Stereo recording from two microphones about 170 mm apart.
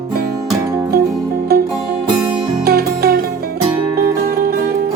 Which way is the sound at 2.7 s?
70° right (ahead or behind).